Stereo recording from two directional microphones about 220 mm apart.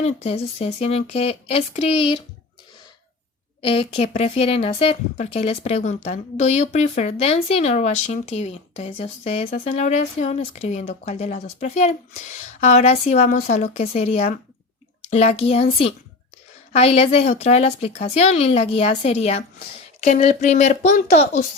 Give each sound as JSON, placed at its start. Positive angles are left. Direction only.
{"t": 0.0, "sound": "a woman's voice", "side_deg": 30}
{"t": 3.6, "sound": "a woman's voice", "side_deg": 25}